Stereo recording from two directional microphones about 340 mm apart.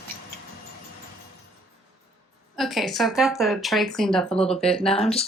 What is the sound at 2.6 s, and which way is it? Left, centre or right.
Speech, centre.